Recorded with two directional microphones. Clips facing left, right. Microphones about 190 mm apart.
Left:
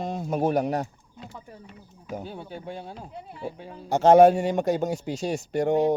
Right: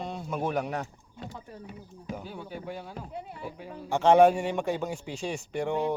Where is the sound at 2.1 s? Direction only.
30° left (ahead or behind).